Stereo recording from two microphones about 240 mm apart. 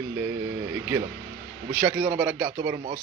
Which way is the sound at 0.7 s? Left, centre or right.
Centre.